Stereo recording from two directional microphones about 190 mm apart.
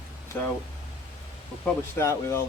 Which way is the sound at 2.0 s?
15° left (ahead or behind).